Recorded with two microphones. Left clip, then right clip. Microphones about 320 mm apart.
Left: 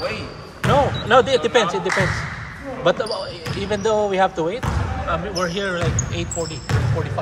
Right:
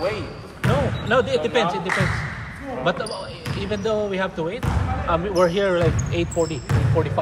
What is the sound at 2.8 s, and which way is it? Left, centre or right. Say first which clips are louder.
Speech: left 5 dB; left.